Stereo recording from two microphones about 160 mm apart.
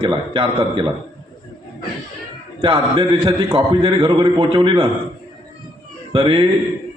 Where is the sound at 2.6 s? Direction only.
30° right (ahead or behind).